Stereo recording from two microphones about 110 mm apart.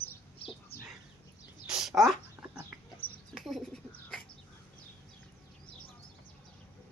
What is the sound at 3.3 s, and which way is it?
Bird, centre (ahead or behind).